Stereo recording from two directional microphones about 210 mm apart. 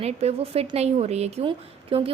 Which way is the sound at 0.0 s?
30° right (ahead or behind).